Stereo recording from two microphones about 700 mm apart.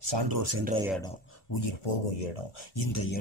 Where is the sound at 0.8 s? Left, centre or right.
Centre.